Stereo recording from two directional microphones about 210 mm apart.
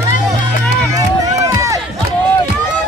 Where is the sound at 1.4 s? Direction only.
15° right (ahead or behind).